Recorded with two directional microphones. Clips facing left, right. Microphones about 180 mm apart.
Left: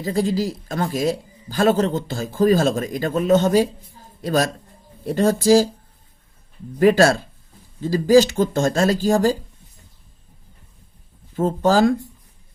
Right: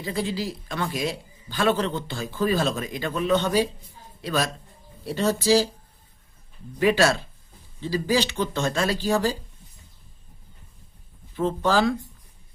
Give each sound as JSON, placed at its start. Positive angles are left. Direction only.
{"t": 0.0, "sound": "a man's voice", "side_deg": 45}
{"t": 6.7, "sound": "speech", "side_deg": 45}
{"t": 11.3, "sound": "speech", "side_deg": 45}